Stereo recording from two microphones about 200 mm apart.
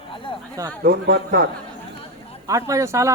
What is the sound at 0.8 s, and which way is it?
Speech, 55° right (ahead or behind).